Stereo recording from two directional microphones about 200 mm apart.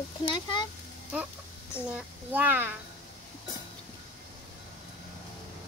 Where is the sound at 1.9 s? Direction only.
5° right (ahead or behind).